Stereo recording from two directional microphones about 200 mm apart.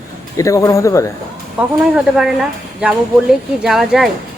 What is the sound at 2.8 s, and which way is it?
Speech, 5° right (ahead or behind).